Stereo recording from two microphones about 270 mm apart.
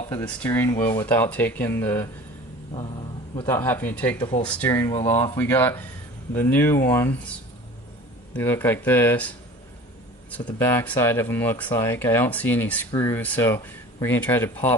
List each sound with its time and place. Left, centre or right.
0.1 s speech: centre
3.4 s speech: centre
4.2 s speech: centre
8.4 s speech: centre
10.4 s speech: centre